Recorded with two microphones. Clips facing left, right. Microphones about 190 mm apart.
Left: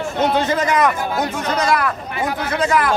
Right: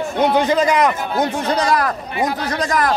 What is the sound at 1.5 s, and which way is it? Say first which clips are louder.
A man's voice: right 1 dB; 35° right (ahead or behind).